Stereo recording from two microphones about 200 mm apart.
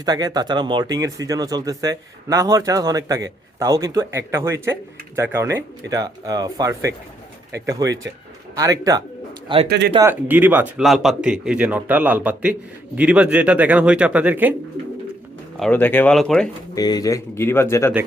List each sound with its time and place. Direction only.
0.0 s speech: 20° right (ahead or behind)
9.6 s speech: 55° right (ahead or behind)
10.0 s speech: 10° right (ahead or behind)
15.5 s speech: 5° left (ahead or behind)
16.7 s speech: 20° left (ahead or behind)